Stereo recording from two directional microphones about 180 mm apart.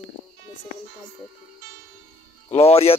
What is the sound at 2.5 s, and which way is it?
Speech, 35° left (ahead or behind).